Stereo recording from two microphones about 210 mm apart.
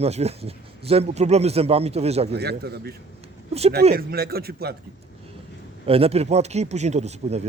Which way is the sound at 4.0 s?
45° right (ahead or behind).